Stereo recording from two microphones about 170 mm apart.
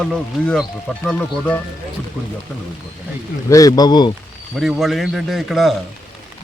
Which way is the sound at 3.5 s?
20° left (ahead or behind).